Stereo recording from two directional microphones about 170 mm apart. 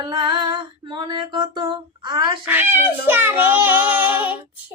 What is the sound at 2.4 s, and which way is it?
Child singing, 10° right (ahead or behind).